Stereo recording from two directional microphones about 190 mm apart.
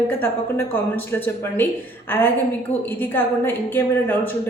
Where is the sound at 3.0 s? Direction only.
10° left (ahead or behind).